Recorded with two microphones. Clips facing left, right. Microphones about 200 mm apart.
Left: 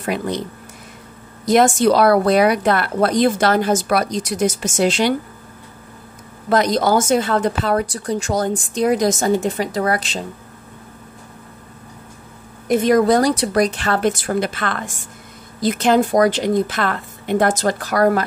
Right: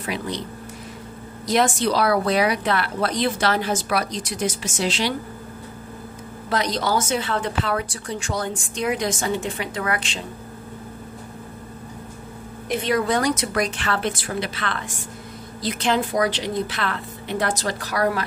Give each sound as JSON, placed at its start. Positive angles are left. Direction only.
{"t": 0.0, "sound": "a woman's voice", "side_deg": 50}
{"t": 6.5, "sound": "a woman's voice", "side_deg": 50}
{"t": 12.6, "sound": "a woman's voice", "side_deg": 45}